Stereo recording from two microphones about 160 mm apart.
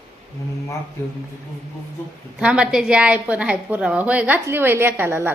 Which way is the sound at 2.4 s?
5° right (ahead or behind).